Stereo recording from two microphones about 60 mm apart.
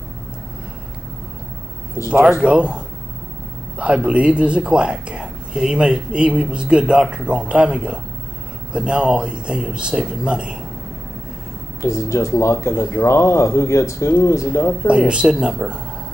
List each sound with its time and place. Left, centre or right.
2.2 s speech: centre
11.8 s speech: left
14.5 s speech: left
14.9 s speech: centre